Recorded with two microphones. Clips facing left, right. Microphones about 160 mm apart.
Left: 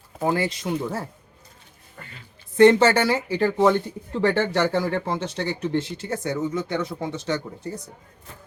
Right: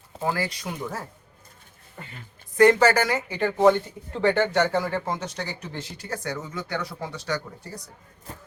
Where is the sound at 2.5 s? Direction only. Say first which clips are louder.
Left 2 dB; 25° left (ahead or behind).